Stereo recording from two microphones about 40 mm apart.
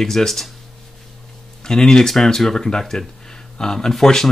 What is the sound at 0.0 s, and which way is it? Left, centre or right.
Speech, centre.